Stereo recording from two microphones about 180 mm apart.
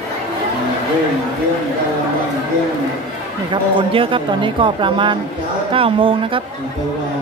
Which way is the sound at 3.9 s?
30° right (ahead or behind).